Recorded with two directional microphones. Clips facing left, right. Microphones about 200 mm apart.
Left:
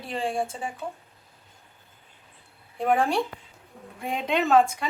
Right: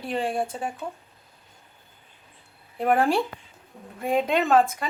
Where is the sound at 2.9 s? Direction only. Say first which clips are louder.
Right 2 dB; 5° right (ahead or behind).